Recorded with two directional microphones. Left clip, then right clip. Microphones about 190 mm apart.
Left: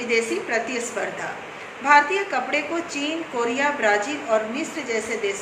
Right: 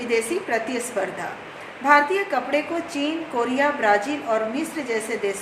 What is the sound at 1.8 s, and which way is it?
A woman's voice, 35° right (ahead or behind).